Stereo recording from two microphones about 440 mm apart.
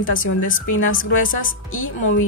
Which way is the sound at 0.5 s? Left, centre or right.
Centre.